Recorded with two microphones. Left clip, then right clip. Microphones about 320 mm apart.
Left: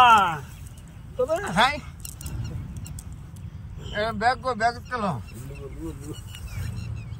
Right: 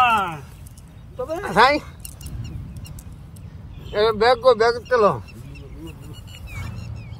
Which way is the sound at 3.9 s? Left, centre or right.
Right.